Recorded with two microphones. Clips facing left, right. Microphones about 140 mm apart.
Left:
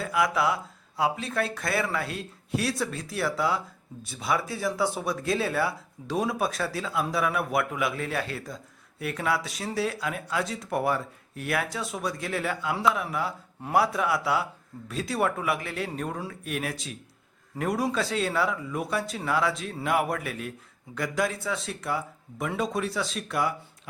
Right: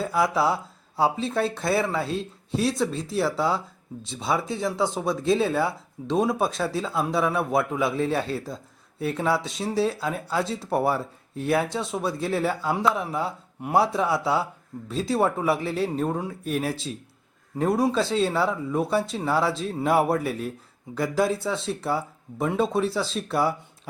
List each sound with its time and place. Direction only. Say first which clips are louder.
0.0 s speech: right 3 dB; 30° right (ahead or behind)